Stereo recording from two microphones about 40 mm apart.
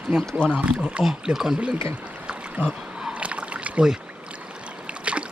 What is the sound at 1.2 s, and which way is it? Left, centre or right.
Speech, centre.